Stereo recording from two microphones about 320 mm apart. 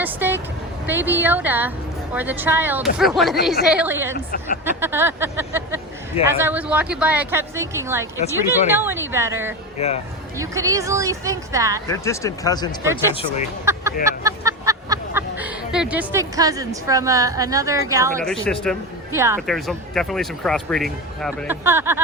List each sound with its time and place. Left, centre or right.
0.0 s speech: centre
9.8 s speech: centre
10.3 s speech: centre
11.9 s speech: centre
13.7 s a sound: centre
14.0 s speech: centre
18.2 s speech: centre
19.1 s speech: centre